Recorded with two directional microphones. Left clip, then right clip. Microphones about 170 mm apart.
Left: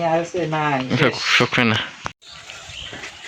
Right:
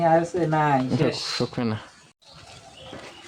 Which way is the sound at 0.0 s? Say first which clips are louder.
Even; 5° right (ahead or behind).